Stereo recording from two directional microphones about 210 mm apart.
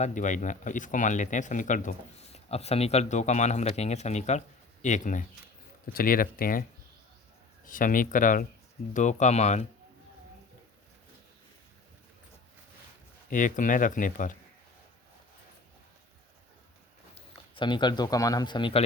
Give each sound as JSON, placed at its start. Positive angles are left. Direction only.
{"t": 0.0, "sound": "speech", "side_deg": 35}
{"t": 13.3, "sound": "speech", "side_deg": 40}
{"t": 17.2, "sound": "speech", "side_deg": 25}